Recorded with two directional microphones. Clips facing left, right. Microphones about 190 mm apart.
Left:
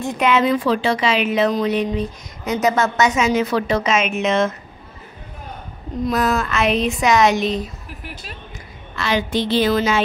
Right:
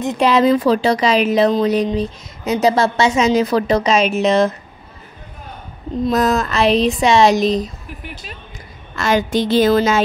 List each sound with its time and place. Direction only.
0.2 s a woman's voice: 35° right (ahead or behind)
6.1 s a woman's voice: 40° right (ahead or behind)
7.6 s speech: centre (ahead or behind)
8.9 s a woman's voice: 45° right (ahead or behind)